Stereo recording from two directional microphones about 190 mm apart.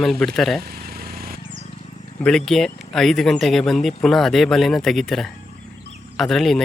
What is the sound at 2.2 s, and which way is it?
Speech, 5° left (ahead or behind).